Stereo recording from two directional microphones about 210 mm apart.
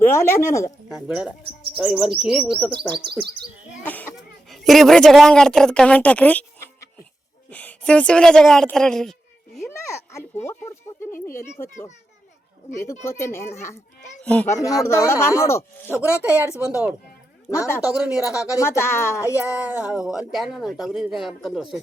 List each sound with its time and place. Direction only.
0.0 s speech: 15° left (ahead or behind)
0.9 s a woman's voice: 5° right (ahead or behind)
3.1 s speech: 50° right (ahead or behind)
3.8 s a sound: 10° left (ahead or behind)
4.4 s a woman's voice: centre (ahead or behind)
7.5 s a woman's voice: 5° left (ahead or behind)
11.0 s speech: 10° left (ahead or behind)
15.9 s speech: 10° right (ahead or behind)
17.5 s speech: 15° left (ahead or behind)
17.9 s a woman's voice: 5° right (ahead or behind)
18.5 s speech: 15° left (ahead or behind)
19.5 s a woman's voice: 5° right (ahead or behind)